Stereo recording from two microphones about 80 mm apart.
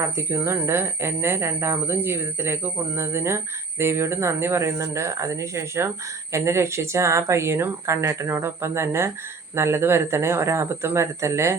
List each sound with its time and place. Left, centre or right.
0.0 s speech: right